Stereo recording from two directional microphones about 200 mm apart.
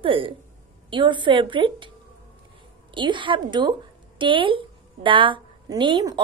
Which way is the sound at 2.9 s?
25° right (ahead or behind).